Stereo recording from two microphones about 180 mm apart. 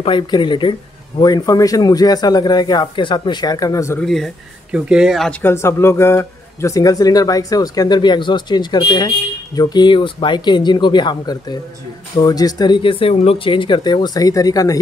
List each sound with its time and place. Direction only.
0.0 s speech: 25° left (ahead or behind)
4.0 s speech: centre (ahead or behind)
5.4 s speech: 15° left (ahead or behind)